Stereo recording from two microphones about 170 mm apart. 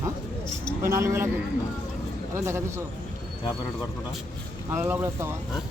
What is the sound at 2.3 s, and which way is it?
Speech, 15° right (ahead or behind).